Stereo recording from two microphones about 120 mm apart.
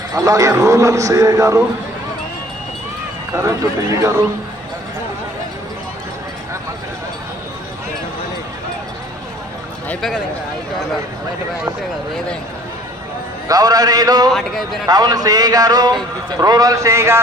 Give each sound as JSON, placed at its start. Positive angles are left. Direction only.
{"t": 0.1, "sound": "speech", "side_deg": -30}
{"t": 3.3, "sound": "speech", "side_deg": -25}
{"t": 13.5, "sound": "a man's voice", "side_deg": -30}
{"t": 14.3, "sound": "speech", "side_deg": 0}
{"t": 14.8, "sound": "a man's voice", "side_deg": -35}